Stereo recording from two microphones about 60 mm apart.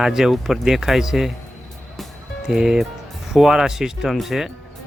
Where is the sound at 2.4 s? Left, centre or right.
Centre.